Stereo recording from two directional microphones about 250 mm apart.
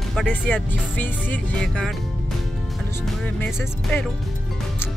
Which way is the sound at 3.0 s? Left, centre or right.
Centre.